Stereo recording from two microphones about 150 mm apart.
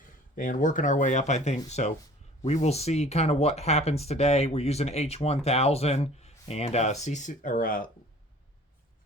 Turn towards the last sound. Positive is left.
turn(degrees=65)  # may be behind; listen again after turning